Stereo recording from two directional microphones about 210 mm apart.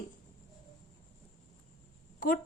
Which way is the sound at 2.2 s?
40° left (ahead or behind).